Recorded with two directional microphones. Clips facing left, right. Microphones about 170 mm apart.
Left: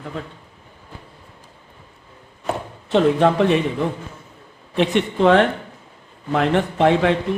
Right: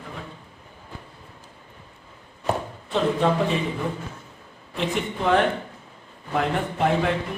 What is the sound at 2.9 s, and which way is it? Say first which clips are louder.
Speech: left 6 dB; 70° left (ahead or behind).